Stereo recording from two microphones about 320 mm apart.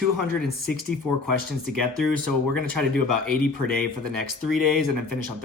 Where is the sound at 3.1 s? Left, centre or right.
Right.